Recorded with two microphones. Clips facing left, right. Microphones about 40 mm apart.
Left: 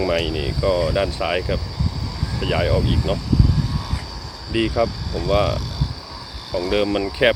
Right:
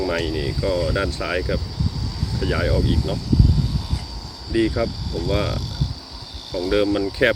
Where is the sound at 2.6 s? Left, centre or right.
Left.